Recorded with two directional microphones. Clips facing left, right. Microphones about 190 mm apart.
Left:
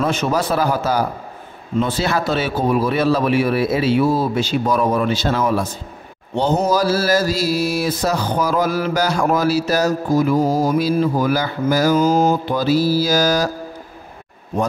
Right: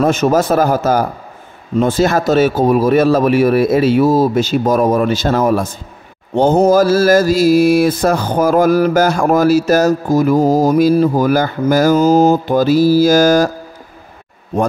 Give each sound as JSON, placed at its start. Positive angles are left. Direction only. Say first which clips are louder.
{"t": 0.0, "sound": "mantra", "louder": "right 6 dB", "side_deg": -45}